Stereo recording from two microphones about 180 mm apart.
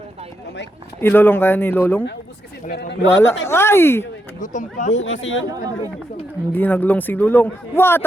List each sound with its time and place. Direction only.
1.0 s a man's voice: 10° left (ahead or behind)
2.6 s speech: 65° left (ahead or behind)
3.4 s a man's voice: 15° left (ahead or behind)
4.4 s speech: 45° left (ahead or behind)
5.0 s speech: 90° left
5.5 s speech: 20° right (ahead or behind)
6.5 s a man's voice: 10° left (ahead or behind)